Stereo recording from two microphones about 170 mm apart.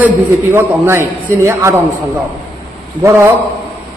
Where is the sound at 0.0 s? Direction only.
15° right (ahead or behind).